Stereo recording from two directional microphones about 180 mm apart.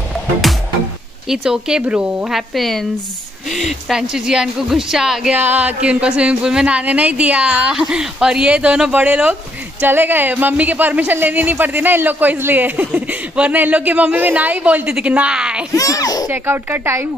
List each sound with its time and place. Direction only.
1.3 s speech: 5° right (ahead or behind)
15.7 s speech: 20° left (ahead or behind)
16.3 s speech: 10° right (ahead or behind)